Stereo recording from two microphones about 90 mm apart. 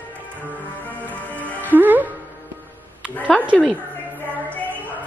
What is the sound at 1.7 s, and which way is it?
Music, 20° right (ahead or behind).